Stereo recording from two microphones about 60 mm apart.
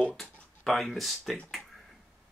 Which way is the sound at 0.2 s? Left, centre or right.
Centre.